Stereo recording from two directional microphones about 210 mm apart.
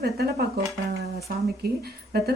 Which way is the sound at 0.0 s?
50° right (ahead or behind).